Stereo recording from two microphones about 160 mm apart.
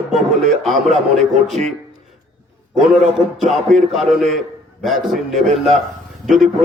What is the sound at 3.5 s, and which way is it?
Speech, centre (ahead or behind).